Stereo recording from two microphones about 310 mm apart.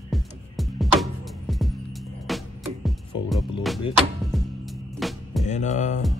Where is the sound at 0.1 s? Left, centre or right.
Centre.